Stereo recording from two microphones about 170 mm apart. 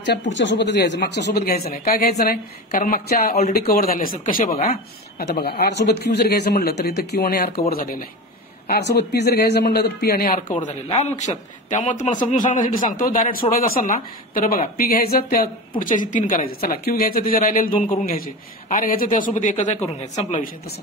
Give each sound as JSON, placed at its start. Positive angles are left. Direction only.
{"t": 0.0, "sound": "speech", "side_deg": 90}
{"t": 1.7, "sound": "speech", "side_deg": 60}
{"t": 5.2, "sound": "a man's voice", "side_deg": 65}
{"t": 8.6, "sound": "a man's voice", "side_deg": 75}
{"t": 10.6, "sound": "a man's voice", "side_deg": 40}